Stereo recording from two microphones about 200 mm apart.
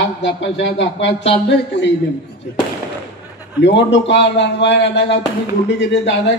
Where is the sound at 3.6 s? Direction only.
65° left (ahead or behind).